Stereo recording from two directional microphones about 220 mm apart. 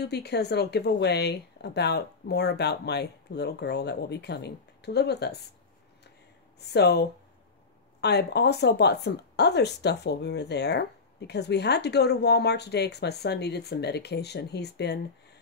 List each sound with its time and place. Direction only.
0.0 s speech: 50° left (ahead or behind)
6.7 s speech: 50° left (ahead or behind)